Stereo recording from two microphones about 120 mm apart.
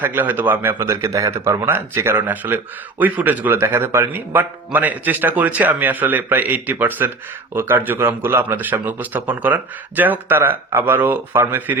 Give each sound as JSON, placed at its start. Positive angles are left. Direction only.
{"t": 0.0, "sound": "a man's voice", "side_deg": -15}
{"t": 1.0, "sound": "a man's voice", "side_deg": -25}